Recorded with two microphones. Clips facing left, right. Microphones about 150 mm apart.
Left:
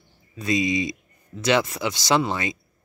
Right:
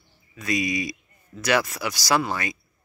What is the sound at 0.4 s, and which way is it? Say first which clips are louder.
Speech: left 3 dB; 25° left (ahead or behind).